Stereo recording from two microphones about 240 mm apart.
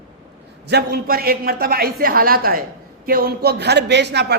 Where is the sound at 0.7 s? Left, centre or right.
Right.